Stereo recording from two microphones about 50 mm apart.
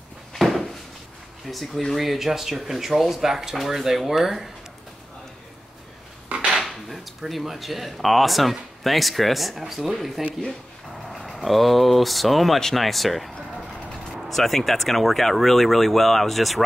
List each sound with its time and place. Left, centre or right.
0.3 s a sound: centre
1.5 s speech: centre
6.2 s dishes: right
6.5 s speech: centre
14.3 s speech: centre